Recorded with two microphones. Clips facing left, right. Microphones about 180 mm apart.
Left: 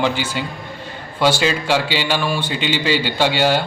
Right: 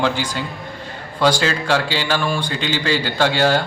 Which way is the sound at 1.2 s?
5° left (ahead or behind).